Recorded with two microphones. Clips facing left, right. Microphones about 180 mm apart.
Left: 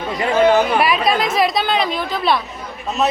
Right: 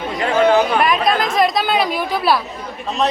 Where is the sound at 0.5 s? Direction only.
5° left (ahead or behind).